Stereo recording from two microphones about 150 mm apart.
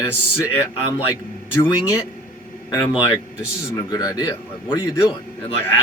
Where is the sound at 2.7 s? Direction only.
30° left (ahead or behind).